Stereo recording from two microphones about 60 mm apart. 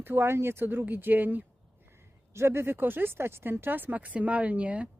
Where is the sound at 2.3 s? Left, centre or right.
Right.